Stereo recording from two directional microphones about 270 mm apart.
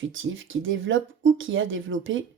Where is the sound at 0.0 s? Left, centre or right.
Right.